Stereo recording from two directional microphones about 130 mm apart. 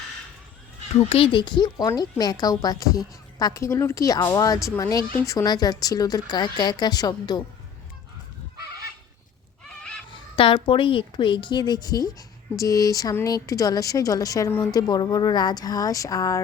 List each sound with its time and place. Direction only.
0.9 s a woman's voice: 45° left (ahead or behind); by 7.4 s 30° left (ahead or behind)
9.6 s neigh: 5° left (ahead or behind)
10.1 s a woman's voice: 40° left (ahead or behind)